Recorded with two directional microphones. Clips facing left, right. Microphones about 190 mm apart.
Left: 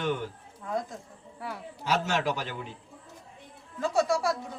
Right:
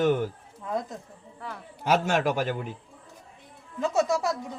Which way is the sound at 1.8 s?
55° right (ahead or behind).